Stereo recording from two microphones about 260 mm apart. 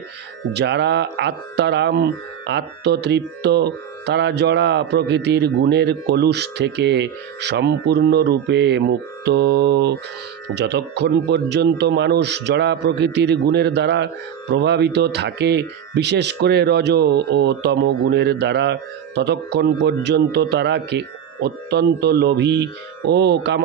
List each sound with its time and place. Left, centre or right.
0.5 s speech: right